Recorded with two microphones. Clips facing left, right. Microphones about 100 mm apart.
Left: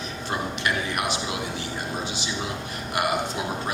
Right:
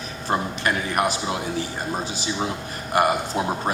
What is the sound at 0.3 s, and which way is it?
Speech, 40° right (ahead or behind).